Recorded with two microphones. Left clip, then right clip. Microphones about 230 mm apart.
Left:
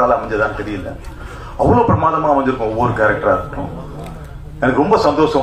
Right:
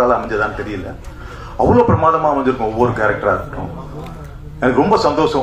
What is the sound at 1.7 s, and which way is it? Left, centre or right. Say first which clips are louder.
Speech: right 1 dB; right.